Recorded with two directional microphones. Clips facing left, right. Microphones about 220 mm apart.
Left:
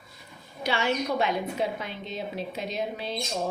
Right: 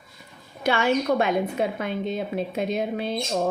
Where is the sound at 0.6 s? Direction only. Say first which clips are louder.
Right 5 dB; 50° right (ahead or behind).